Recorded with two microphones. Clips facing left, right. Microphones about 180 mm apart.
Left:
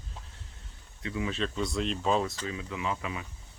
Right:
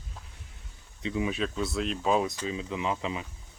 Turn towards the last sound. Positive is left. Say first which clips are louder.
# right 3 dB
turn(degrees=-20)  # may be behind; listen again after turning